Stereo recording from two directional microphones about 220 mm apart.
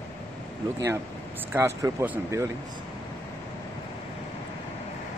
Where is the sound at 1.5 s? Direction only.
10° right (ahead or behind).